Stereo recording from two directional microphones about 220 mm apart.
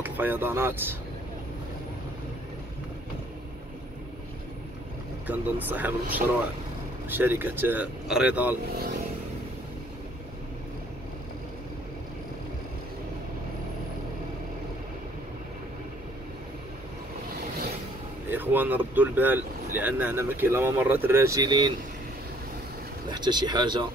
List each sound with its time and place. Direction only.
0.0 s speech: 10° right (ahead or behind)
5.2 s speech: 10° right (ahead or behind)
18.3 s speech: 10° right (ahead or behind)
23.0 s speech: 20° right (ahead or behind)